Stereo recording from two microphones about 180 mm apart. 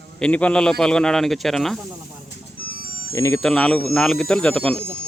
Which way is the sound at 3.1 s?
15° left (ahead or behind).